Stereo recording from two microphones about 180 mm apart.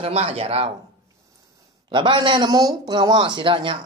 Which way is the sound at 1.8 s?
25° right (ahead or behind).